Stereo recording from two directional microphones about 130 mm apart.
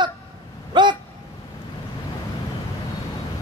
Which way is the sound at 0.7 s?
35° right (ahead or behind).